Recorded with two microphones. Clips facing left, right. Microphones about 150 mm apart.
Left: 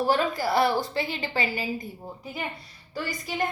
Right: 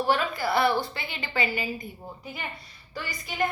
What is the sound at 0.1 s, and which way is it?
A woman's voice, 40° left (ahead or behind).